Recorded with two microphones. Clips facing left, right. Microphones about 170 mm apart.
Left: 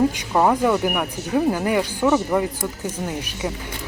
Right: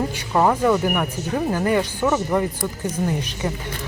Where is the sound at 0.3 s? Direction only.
10° left (ahead or behind).